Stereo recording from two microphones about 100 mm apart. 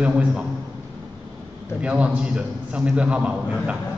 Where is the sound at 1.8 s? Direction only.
10° right (ahead or behind).